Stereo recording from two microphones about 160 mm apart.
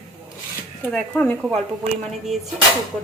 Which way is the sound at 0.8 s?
10° left (ahead or behind).